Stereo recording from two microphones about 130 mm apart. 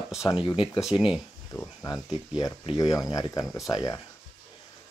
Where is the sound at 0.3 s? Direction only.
40° left (ahead or behind).